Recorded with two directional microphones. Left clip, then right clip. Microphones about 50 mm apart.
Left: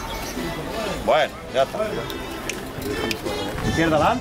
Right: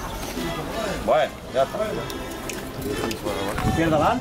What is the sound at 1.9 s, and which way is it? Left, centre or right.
Music, centre.